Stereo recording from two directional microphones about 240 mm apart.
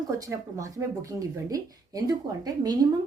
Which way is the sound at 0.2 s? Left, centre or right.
Centre.